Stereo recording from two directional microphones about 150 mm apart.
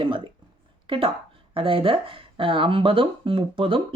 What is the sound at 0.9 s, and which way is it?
Speech, 35° right (ahead or behind).